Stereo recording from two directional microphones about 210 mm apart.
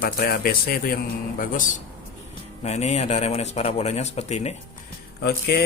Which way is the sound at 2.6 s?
30° left (ahead or behind).